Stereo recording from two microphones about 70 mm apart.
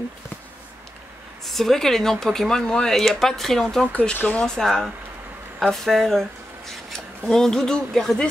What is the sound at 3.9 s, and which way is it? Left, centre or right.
Speech, centre.